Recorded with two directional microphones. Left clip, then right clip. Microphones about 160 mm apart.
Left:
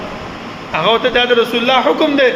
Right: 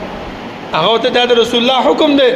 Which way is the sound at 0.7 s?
35° right (ahead or behind).